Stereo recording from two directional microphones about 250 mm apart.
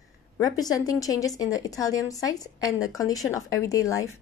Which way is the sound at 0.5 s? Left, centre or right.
Centre.